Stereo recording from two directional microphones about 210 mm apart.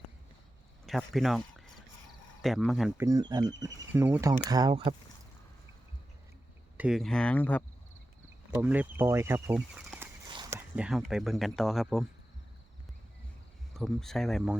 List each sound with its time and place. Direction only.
0.9 s speech: centre (ahead or behind)
3.0 s speech: 15° right (ahead or behind)
6.7 s speech: 5° right (ahead or behind)
8.4 s speech: 5° right (ahead or behind)
10.3 s a sound: 15° right (ahead or behind)
10.8 s speech: 5° right (ahead or behind)
13.7 s speech: centre (ahead or behind)